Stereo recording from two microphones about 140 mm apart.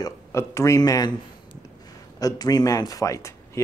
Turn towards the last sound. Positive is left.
turn(degrees=20)  # may be behind; listen again after turning